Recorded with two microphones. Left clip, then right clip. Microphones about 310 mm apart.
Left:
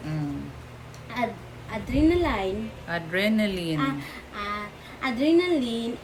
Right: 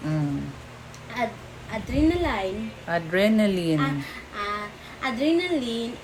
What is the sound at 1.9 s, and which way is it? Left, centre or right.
Speech, centre.